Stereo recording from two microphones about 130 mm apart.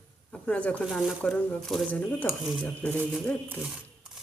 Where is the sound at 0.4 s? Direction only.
10° left (ahead or behind).